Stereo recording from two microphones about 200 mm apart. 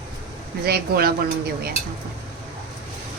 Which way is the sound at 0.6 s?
50° right (ahead or behind).